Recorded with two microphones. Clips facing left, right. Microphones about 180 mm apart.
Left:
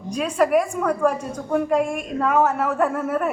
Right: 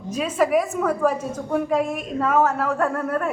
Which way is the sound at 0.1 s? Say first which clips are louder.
Left 1 dB; 5° right (ahead or behind).